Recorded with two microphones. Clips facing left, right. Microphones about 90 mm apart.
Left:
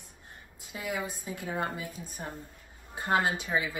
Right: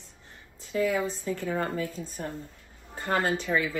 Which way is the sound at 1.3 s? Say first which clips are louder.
Right 3 dB; 15° left (ahead or behind).